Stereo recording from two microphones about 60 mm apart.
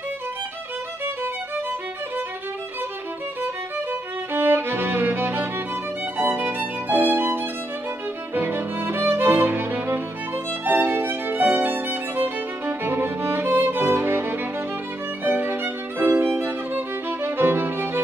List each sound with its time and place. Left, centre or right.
4.3 s music: right
6.1 s violin: right
8.4 s music: right
10.6 s violin: right